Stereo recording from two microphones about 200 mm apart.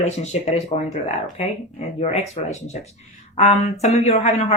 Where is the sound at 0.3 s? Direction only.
35° left (ahead or behind).